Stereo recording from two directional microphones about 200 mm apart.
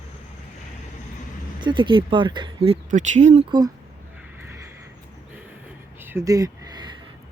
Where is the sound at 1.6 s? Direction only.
25° right (ahead or behind).